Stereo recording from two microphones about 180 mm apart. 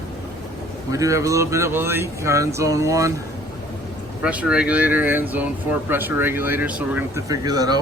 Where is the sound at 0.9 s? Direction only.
20° right (ahead or behind).